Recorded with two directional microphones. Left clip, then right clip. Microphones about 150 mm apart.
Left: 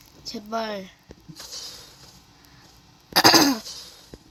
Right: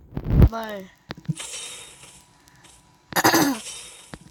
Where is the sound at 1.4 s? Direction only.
20° right (ahead or behind).